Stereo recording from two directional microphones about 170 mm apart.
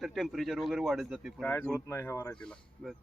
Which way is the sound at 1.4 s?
10° left (ahead or behind).